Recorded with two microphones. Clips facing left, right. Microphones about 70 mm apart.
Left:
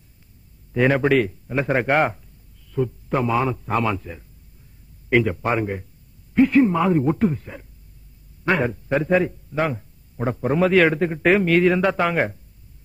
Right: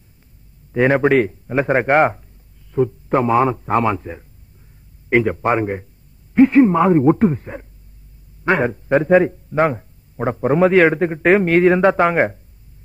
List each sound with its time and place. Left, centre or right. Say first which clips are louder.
0.7 s a man's voice: right 3 dB; right